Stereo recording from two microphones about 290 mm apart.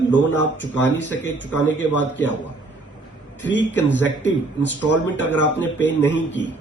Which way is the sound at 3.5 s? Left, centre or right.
Left.